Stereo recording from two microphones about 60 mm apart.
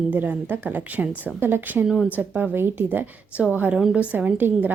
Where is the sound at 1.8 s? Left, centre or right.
Centre.